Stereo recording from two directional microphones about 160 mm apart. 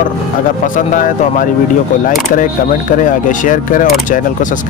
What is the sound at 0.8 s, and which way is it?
Speech, 55° left (ahead or behind).